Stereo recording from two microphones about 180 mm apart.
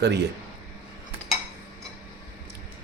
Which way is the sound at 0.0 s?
70° right (ahead or behind).